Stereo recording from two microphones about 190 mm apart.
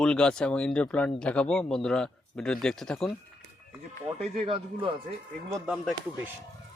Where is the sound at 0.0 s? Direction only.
5° left (ahead or behind).